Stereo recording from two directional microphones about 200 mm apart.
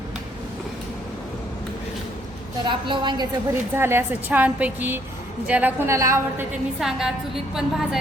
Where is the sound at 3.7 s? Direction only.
10° right (ahead or behind).